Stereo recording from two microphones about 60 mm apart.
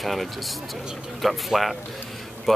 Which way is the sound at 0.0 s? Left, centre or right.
Centre.